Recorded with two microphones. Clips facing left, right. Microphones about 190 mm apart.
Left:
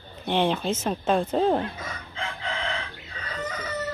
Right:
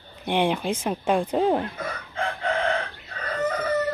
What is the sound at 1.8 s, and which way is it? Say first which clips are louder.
Chicken: right 5 dB; 60° right (ahead or behind).